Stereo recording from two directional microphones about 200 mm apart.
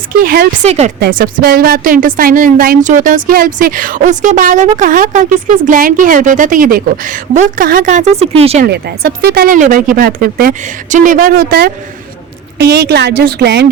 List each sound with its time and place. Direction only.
0.2 s a woman's voice: 45° right (ahead or behind)
0.7 s speech: 35° right (ahead or behind)
0.9 s a woman's voice: 50° right (ahead or behind); by 8.6 s 30° right (ahead or behind)
8.6 s a woman's voice: 55° right (ahead or behind)